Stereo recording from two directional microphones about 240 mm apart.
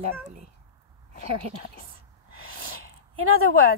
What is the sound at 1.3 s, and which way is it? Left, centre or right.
Speech, right.